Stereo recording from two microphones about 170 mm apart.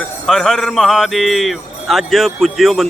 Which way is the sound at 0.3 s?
5° left (ahead or behind).